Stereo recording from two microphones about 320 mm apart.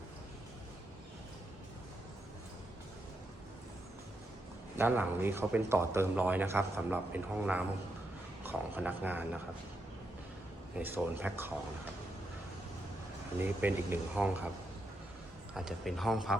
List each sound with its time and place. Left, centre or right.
4.8 s speech: centre
10.8 s speech: centre
13.4 s speech: centre
15.5 s speech: centre